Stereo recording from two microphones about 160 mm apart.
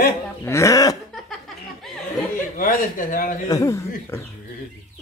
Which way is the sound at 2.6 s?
65° left (ahead or behind).